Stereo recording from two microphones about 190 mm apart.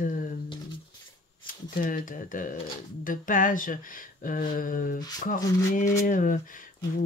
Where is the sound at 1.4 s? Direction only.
45° left (ahead or behind).